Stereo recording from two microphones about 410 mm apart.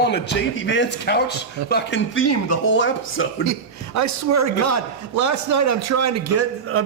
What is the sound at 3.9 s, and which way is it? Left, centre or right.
A man's voice, right.